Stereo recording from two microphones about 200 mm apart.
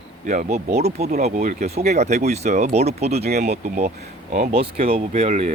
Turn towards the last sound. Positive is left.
turn(degrees=-35)  # may be behind; listen again after turning